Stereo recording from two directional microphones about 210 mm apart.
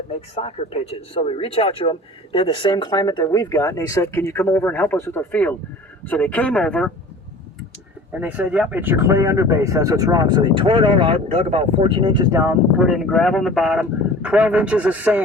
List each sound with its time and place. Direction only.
0.3 s speech: 30° left (ahead or behind); by 6.9 s 5° left (ahead or behind)
8.2 s speech: 5° right (ahead or behind)
12.8 s speech: centre (ahead or behind)